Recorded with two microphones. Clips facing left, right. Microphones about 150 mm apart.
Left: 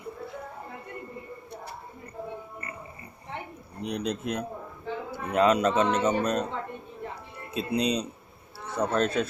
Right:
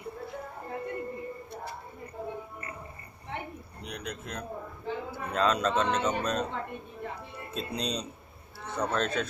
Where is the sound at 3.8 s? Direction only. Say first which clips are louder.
Left 10 dB; 25° left (ahead or behind).